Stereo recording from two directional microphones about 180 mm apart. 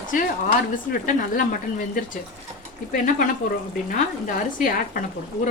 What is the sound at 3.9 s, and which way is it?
A woman's voice, 45° left (ahead or behind).